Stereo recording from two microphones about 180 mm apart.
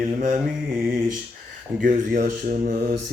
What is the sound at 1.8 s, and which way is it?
Mantra, 45° right (ahead or behind).